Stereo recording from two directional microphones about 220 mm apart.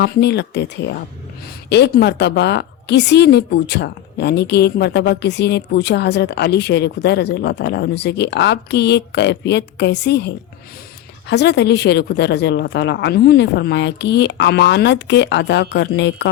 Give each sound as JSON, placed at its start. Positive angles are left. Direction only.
{"t": 0.0, "sound": "a woman's voice", "side_deg": 50}